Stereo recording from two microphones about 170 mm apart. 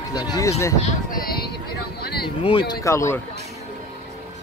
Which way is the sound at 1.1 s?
60° left (ahead or behind).